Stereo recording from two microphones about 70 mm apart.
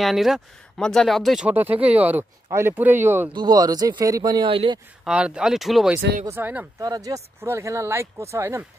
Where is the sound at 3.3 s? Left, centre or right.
Right.